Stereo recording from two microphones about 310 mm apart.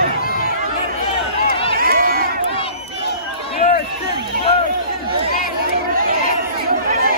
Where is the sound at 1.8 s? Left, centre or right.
Right.